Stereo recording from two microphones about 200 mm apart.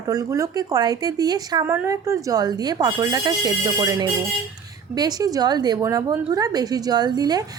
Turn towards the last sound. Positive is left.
turn(degrees=-20)  # may be behind; listen again after turning